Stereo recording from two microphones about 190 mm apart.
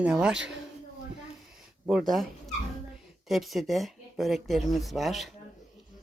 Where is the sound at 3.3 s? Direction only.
Centre (ahead or behind).